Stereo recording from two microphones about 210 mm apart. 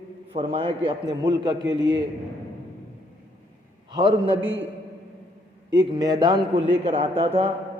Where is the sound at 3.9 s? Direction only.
20° right (ahead or behind).